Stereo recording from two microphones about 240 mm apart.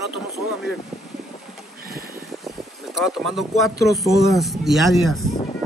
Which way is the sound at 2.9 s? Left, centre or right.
Centre.